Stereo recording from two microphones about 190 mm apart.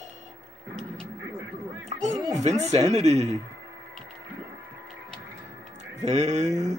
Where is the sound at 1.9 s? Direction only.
40° right (ahead or behind).